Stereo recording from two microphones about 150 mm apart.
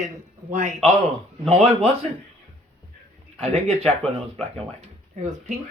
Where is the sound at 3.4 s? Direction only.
40° right (ahead or behind).